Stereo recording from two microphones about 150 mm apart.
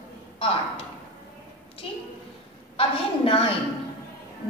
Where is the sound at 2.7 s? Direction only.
40° left (ahead or behind).